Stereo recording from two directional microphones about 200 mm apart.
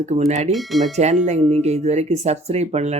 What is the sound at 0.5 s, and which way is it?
Speech, centre (ahead or behind).